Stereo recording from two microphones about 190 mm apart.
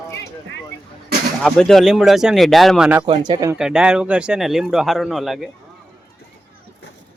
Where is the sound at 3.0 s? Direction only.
25° right (ahead or behind).